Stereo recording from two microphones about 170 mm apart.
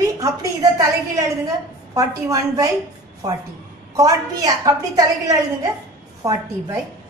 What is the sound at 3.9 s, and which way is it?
A woman's voice, 20° right (ahead or behind).